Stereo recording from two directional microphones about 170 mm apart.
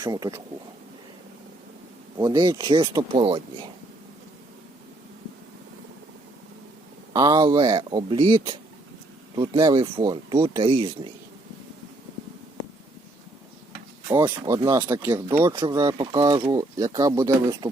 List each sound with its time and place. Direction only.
0.0 s speech: 20° right (ahead or behind)
2.1 s speech: 25° right (ahead or behind)
7.1 s speech: 20° right (ahead or behind)
14.1 s speech: 20° right (ahead or behind)
15.5 s speech: 25° right (ahead or behind)